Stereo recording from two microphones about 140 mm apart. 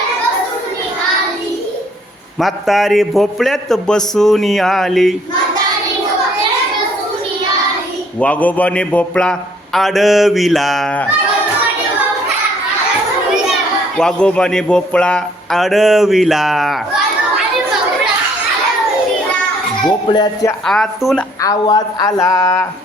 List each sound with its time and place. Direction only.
2.4 s a man's voice: centre (ahead or behind)
8.2 s a man's voice: 10° left (ahead or behind)
13.9 s a man's voice: 5° left (ahead or behind)
20.1 s speech: 30° left (ahead or behind)
20.7 s a man's voice: centre (ahead or behind)
21.4 s a woman's voice: 25° left (ahead or behind)